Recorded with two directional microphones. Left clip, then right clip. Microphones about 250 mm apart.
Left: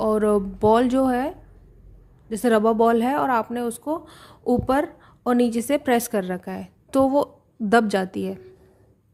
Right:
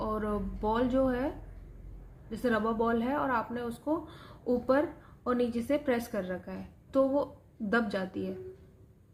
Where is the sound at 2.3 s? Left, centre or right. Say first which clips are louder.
Left 11 dB; left.